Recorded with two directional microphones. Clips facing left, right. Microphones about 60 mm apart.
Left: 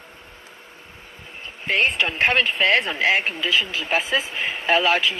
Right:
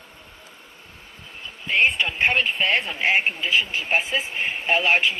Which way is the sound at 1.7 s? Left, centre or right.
Left.